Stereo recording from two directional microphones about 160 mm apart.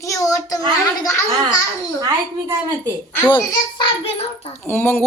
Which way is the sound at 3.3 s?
35° left (ahead or behind).